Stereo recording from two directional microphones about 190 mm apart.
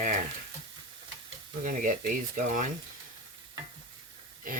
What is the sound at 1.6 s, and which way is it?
Speech, 45° right (ahead or behind).